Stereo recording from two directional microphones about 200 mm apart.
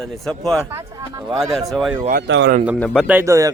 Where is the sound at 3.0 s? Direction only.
10° right (ahead or behind).